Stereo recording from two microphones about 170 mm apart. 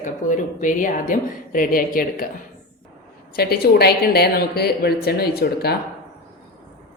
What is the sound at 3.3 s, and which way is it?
Speech, 65° left (ahead or behind).